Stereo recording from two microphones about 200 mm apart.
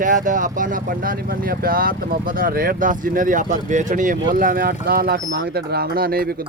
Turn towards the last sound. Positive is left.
turn(degrees=-50)  # may be behind; listen again after turning